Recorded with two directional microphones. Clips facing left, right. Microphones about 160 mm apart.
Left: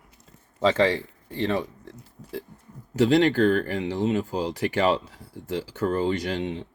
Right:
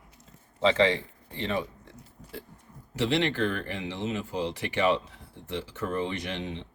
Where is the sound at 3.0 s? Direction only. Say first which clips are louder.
Left 7 dB; 40° left (ahead or behind).